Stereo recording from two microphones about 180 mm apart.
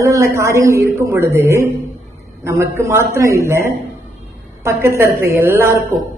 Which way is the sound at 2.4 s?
15° right (ahead or behind).